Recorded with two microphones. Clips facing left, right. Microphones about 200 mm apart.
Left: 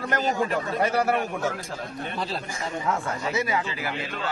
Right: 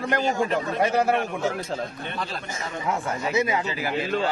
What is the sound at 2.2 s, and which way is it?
Speech, 35° left (ahead or behind).